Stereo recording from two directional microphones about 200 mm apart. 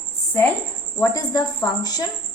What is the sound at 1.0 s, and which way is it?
A woman's voice, 15° left (ahead or behind).